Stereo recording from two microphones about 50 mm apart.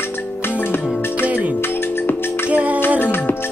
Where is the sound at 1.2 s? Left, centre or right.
Right.